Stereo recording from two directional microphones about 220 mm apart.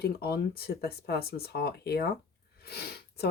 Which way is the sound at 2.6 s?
45° left (ahead or behind).